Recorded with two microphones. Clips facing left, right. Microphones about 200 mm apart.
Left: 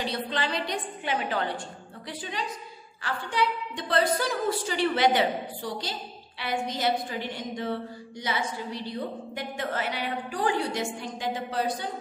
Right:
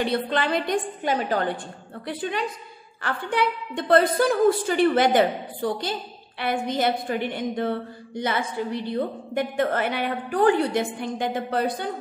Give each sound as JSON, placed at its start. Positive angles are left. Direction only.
{"t": 0.0, "sound": "a woman's voice", "side_deg": -55}
{"t": 2.0, "sound": "a woman's voice", "side_deg": -60}